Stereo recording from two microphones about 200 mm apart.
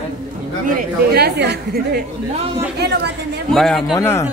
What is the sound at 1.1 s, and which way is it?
A woman's voice, 55° right (ahead or behind).